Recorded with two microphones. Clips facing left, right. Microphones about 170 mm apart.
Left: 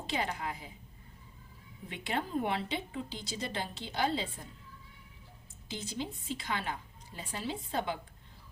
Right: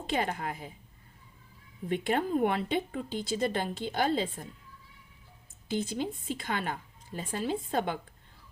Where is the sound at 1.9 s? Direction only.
50° right (ahead or behind).